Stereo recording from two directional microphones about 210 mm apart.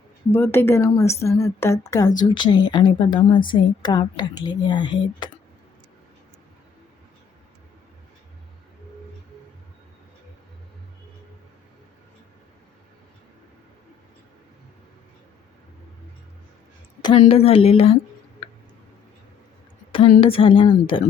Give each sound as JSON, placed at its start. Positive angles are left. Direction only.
{"t": 0.3, "sound": "a woman's voice", "side_deg": 10}
{"t": 17.0, "sound": "a woman's voice", "side_deg": 25}
{"t": 19.9, "sound": "a woman's voice", "side_deg": 25}